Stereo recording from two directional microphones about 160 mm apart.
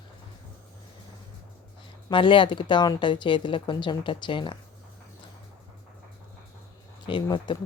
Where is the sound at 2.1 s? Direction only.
30° left (ahead or behind).